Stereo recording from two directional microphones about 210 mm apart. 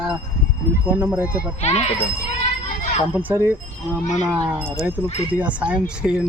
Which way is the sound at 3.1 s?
10° right (ahead or behind).